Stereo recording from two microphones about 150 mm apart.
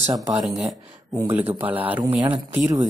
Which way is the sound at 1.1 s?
15° right (ahead or behind).